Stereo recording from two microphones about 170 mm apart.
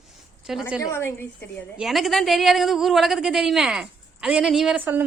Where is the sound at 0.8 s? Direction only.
15° left (ahead or behind).